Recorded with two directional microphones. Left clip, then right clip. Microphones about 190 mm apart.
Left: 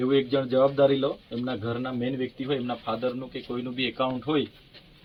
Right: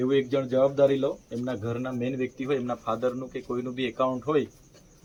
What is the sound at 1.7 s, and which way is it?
Speech, 15° left (ahead or behind).